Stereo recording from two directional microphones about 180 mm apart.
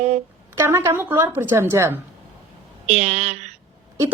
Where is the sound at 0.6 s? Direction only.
15° right (ahead or behind).